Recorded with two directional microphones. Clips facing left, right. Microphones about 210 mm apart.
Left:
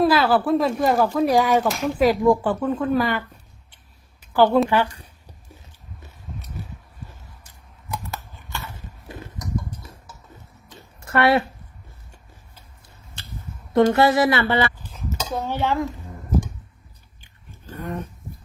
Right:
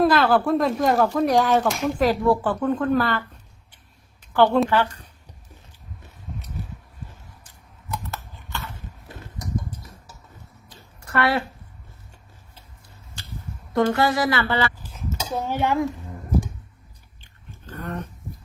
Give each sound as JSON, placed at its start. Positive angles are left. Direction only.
{"t": 0.0, "sound": "speech", "side_deg": 5}
{"t": 4.5, "sound": "speech", "side_deg": 10}
{"t": 7.9, "sound": "a sound", "side_deg": 10}
{"t": 11.0, "sound": "speech", "side_deg": 25}
{"t": 13.7, "sound": "speech", "side_deg": 25}
{"t": 15.3, "sound": "dishes", "side_deg": -15}
{"t": 17.7, "sound": "speech", "side_deg": 10}